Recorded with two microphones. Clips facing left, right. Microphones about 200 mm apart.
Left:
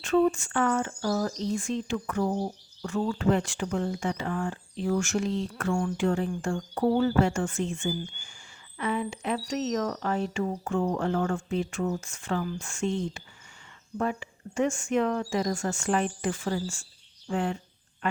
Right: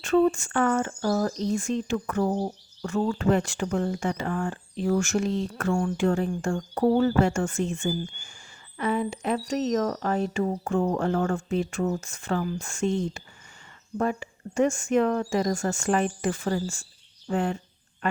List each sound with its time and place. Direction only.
0.0 s speech: 45° right (ahead or behind)